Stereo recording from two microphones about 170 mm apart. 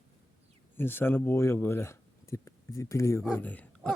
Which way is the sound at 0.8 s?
10° left (ahead or behind).